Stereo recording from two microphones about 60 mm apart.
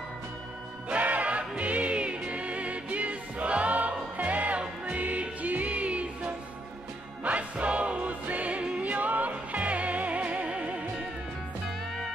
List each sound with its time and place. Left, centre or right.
0.8 s music: right